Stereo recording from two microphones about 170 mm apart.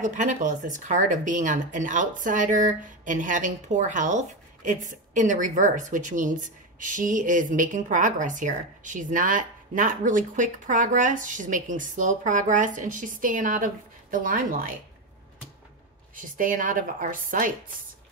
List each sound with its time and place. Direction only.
0.0 s speech: 45° right (ahead or behind)
16.2 s speech: 50° right (ahead or behind)